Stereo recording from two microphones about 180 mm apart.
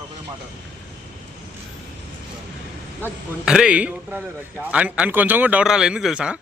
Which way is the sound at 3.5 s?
5° right (ahead or behind).